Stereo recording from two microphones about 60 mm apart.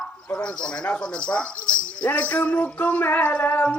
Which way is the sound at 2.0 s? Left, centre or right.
Left.